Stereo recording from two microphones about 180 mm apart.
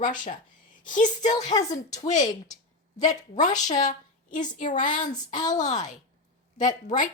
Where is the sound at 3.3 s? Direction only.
45° left (ahead or behind).